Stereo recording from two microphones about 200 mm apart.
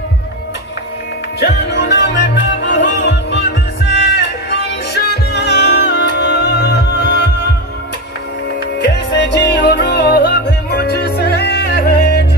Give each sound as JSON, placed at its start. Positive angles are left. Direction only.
{"t": 1.4, "sound": "music", "side_deg": 60}
{"t": 8.7, "sound": "music", "side_deg": 60}